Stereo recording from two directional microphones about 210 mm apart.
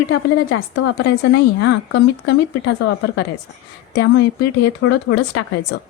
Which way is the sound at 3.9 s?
50° left (ahead or behind).